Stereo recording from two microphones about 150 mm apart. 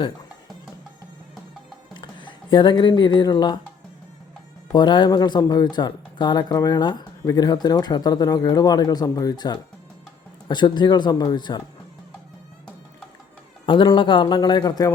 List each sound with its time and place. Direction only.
1.9 s speech: 30° left (ahead or behind)
4.7 s speech: 30° left (ahead or behind)
13.7 s a man's voice: 35° left (ahead or behind)